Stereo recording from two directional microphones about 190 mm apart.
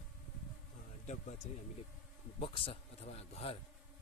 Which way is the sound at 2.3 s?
30° left (ahead or behind).